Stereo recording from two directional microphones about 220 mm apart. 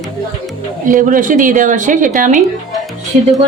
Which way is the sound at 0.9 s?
35° right (ahead or behind).